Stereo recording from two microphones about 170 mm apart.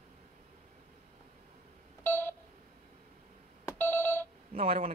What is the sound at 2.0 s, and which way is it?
Telephone dialing, 15° left (ahead or behind).